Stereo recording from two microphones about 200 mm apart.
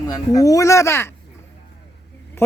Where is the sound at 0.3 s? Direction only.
15° left (ahead or behind).